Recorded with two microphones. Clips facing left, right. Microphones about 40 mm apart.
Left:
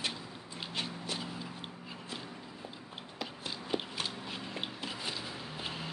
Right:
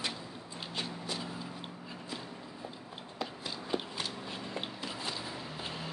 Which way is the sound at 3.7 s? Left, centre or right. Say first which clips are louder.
Even; centre.